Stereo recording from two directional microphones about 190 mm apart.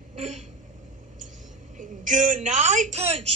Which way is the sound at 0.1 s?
40° right (ahead or behind).